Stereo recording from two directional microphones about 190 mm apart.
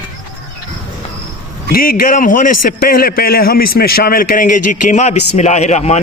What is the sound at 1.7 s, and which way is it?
A man's voice, 50° left (ahead or behind).